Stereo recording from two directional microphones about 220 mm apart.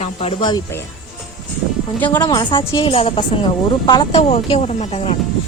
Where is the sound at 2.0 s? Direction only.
20° left (ahead or behind).